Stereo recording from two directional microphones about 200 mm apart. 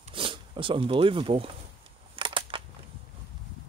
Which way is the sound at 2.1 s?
25° right (ahead or behind).